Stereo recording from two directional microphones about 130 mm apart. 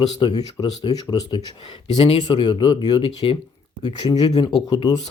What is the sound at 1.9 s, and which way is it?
Speech, 45° left (ahead or behind).